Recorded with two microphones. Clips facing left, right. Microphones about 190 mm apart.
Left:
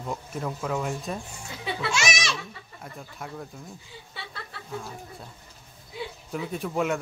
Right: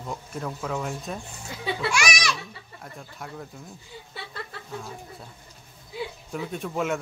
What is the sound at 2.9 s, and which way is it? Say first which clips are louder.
Speech: left 1 dB; centre (ahead or behind).